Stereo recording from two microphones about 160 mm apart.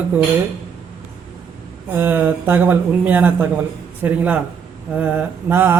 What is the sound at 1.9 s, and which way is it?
Speech, 15° right (ahead or behind).